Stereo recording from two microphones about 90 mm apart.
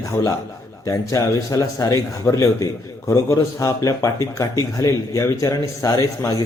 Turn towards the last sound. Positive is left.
turn(degrees=35)  # may be behind; listen again after turning